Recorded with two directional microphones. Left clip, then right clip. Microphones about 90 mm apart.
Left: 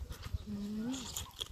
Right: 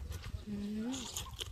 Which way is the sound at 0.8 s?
30° right (ahead or behind).